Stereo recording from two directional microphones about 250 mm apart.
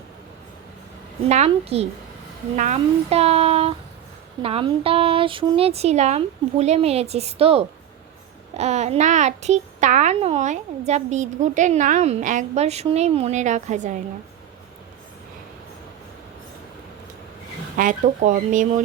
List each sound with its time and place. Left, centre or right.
1.3 s a child's voice: right
17.7 s speech: right